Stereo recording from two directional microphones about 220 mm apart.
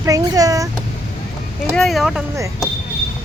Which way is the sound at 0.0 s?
15° right (ahead or behind).